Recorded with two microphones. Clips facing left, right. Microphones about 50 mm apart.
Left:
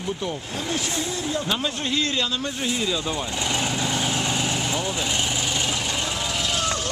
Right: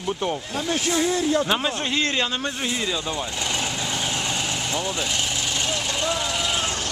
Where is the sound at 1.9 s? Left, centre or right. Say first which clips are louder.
Even; right.